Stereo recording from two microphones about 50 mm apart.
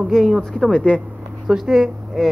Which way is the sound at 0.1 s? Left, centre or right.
Centre.